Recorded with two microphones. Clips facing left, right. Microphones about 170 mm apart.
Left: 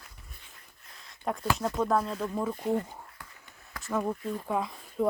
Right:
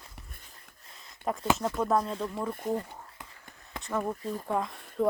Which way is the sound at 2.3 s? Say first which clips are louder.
Left 2 dB; 15° left (ahead or behind).